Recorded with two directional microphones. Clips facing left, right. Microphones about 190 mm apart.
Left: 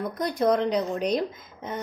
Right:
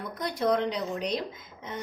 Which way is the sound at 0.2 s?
45° left (ahead or behind).